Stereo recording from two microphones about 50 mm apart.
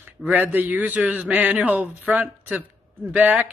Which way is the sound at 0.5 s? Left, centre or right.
Right.